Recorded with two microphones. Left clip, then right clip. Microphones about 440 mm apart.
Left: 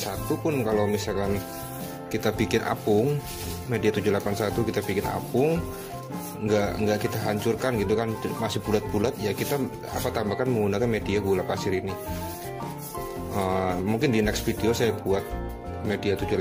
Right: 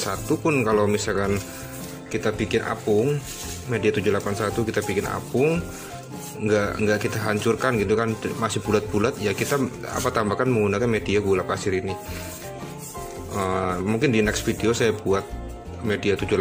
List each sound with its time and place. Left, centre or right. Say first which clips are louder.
0.0 s speech: right 4 dB; left
2.1 s speech: right 2 dB; left
13.4 s speech: right 2 dB; left